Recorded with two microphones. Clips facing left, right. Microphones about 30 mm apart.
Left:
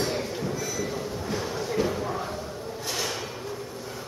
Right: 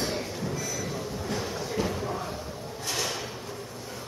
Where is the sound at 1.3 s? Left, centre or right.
Centre.